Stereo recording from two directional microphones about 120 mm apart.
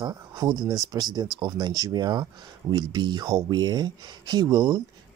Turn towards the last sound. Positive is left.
turn(degrees=-35)  # may be behind; listen again after turning